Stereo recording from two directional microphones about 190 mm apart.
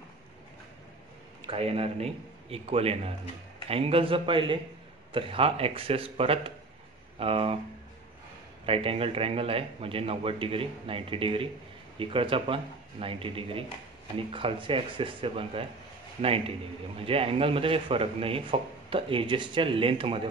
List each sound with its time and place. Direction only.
1.4 s a man's voice: 30° right (ahead or behind)
8.6 s a man's voice: 30° right (ahead or behind)